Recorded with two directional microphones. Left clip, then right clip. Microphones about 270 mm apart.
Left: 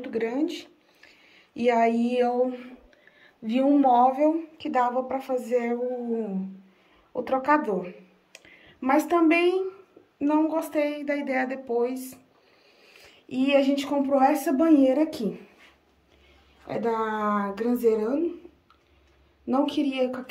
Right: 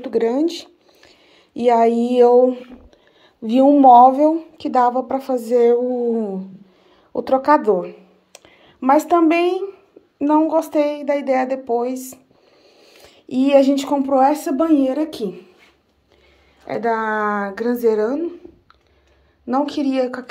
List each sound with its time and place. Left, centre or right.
0.0 s speech: centre
7.2 s speech: centre
16.6 s speech: centre
19.4 s speech: centre